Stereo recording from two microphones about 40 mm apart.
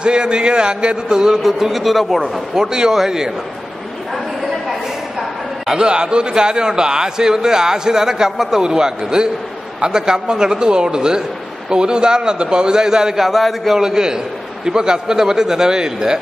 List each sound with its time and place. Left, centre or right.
0.0 s a man's voice: right
1.4 s a man's voice: centre
2.5 s a man's voice: centre
5.7 s a man's voice: right
8.6 s a man's voice: centre
13.2 s a man's voice: centre
13.7 s a man's voice: centre